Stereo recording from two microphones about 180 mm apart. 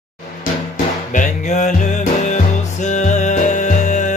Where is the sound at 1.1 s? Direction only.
45° left (ahead or behind).